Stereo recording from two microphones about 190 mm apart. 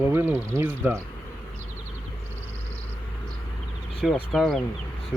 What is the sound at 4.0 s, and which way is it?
Speech, centre (ahead or behind).